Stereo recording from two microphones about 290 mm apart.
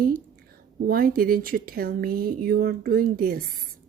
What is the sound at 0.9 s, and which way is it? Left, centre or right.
Speech, right.